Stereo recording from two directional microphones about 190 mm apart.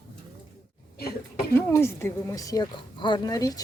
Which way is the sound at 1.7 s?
15° left (ahead or behind).